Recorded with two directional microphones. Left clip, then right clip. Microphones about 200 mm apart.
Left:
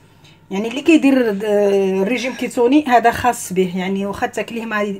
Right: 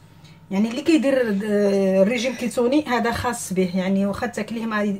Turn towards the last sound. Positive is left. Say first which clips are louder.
# left 4 dB
turn(degrees=40)  # may be behind; listen again after turning